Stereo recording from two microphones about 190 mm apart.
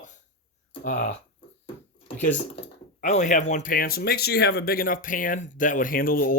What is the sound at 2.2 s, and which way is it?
Speech, 40° left (ahead or behind).